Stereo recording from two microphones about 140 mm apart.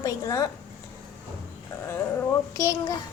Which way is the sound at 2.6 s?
20° left (ahead or behind).